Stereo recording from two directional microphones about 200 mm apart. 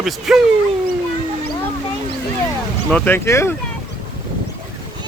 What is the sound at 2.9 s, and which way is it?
Speech, 5° left (ahead or behind).